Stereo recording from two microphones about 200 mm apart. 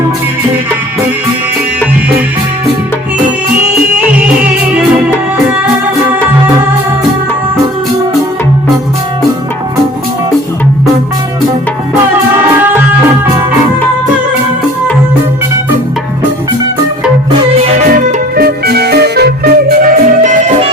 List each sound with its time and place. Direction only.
4.7 s music: 5° right (ahead or behind)
18.3 s music: 50° right (ahead or behind)